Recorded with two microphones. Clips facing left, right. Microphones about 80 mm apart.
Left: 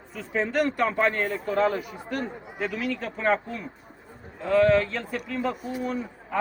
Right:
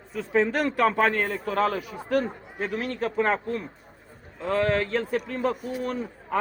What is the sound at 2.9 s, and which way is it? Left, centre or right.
Speech, right.